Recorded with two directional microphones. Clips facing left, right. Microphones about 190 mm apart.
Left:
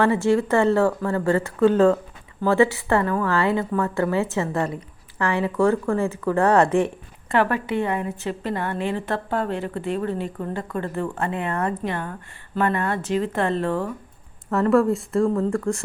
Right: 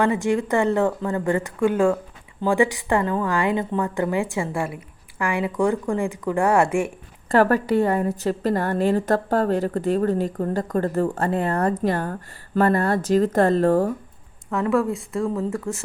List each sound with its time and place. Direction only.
0.0 s a woman's voice: 15° right (ahead or behind)
7.3 s a woman's voice: 40° right (ahead or behind)
14.5 s speech: centre (ahead or behind)
15.4 s speech: 20° right (ahead or behind)